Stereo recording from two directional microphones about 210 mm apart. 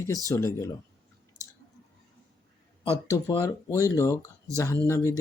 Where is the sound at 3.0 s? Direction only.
20° left (ahead or behind).